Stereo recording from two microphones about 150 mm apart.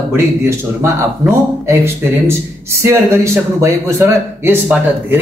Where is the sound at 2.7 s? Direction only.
20° right (ahead or behind).